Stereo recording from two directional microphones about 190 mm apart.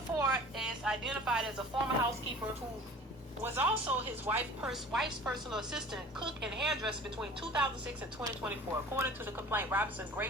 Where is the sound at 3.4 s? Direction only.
10° right (ahead or behind).